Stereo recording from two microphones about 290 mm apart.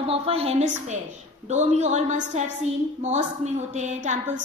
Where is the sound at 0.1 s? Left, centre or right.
Centre.